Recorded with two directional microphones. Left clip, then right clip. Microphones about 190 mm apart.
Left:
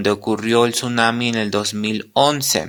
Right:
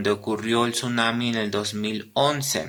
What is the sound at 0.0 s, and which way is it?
Speech, 45° left (ahead or behind).